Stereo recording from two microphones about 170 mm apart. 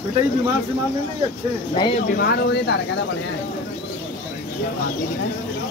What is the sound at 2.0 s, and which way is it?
Speech, 65° left (ahead or behind).